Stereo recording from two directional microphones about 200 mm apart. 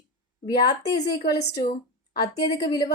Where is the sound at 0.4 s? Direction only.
20° left (ahead or behind).